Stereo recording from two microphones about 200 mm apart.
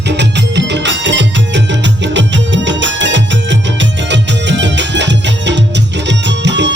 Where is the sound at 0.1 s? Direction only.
60° right (ahead or behind).